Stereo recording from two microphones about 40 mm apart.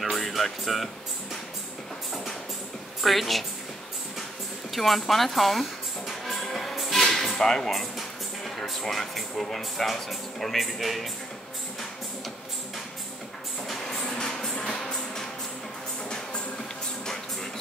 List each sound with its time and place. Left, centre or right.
0.0 s music: centre
3.0 s a man's voice: centre
4.7 s speech: centre
6.5 s music: centre
7.0 s a sound: centre
8.8 s a man's voice: centre
13.7 s music: centre
17.0 s music: centre